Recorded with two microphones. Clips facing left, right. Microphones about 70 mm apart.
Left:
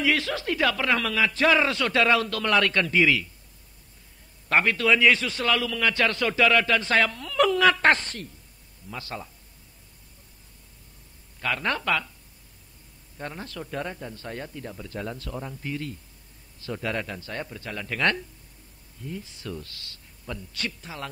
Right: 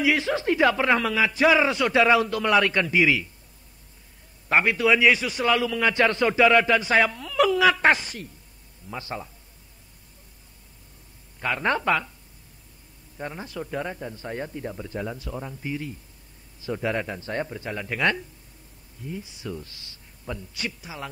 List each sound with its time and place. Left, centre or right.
0.0 s a man's voice: centre
4.5 s a man's voice: centre
8.9 s speech: right
11.3 s speech: centre
13.2 s a man's voice: centre